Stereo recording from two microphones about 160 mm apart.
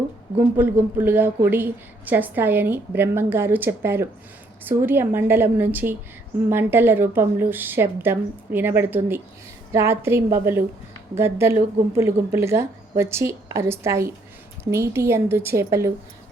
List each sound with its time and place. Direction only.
0.3 s a woman's voice: 10° right (ahead or behind)